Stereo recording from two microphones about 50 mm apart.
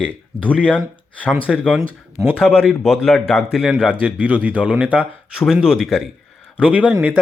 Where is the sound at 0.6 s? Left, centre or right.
Left.